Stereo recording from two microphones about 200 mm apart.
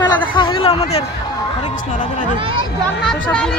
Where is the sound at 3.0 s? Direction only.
5° left (ahead or behind).